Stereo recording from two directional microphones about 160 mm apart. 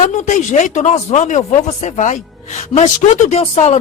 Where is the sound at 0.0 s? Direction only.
50° left (ahead or behind).